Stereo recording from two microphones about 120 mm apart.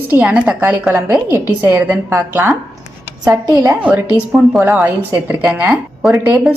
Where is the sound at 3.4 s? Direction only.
30° right (ahead or behind).